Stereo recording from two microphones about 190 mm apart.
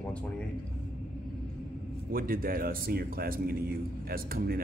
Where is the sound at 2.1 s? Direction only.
50° right (ahead or behind).